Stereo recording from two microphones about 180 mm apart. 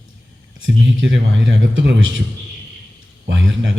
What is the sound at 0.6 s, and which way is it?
A man's voice, 90° right.